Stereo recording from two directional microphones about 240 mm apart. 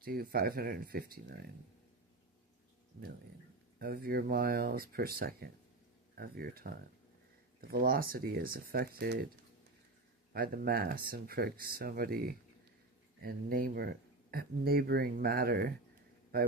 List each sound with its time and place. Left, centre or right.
0.0 s speech: right
3.8 s speech: right
10.3 s speech: right